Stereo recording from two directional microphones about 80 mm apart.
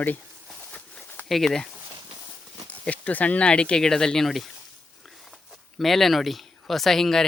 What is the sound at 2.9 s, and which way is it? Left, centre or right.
Speech, centre.